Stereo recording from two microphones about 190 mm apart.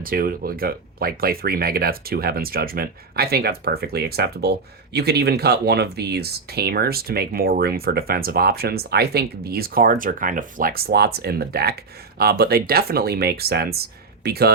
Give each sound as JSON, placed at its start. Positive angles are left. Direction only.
{"t": 0.0, "sound": "speech", "side_deg": -50}